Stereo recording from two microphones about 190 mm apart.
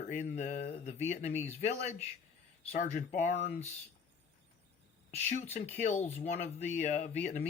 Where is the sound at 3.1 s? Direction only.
40° left (ahead or behind).